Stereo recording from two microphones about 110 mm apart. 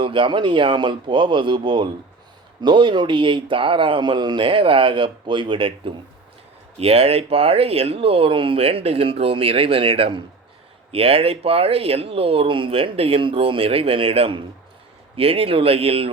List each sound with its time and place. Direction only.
0.0 s speech: 50° right (ahead or behind)
6.7 s speech: 65° right (ahead or behind)